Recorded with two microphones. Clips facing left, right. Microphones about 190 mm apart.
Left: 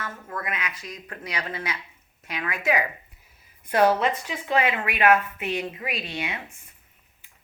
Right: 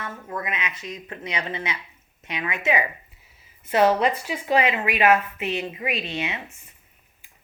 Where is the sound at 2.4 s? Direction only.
15° right (ahead or behind).